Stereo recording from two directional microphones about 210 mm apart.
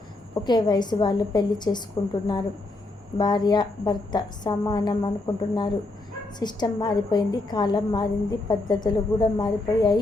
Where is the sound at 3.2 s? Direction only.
20° left (ahead or behind).